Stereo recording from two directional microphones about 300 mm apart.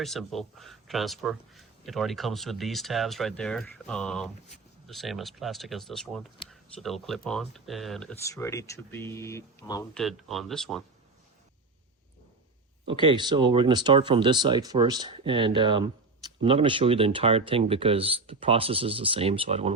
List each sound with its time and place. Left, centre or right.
0.0 s a man's voice: centre
12.9 s speech: centre